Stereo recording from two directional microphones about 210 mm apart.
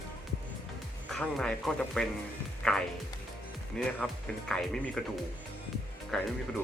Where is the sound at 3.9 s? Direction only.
5° left (ahead or behind).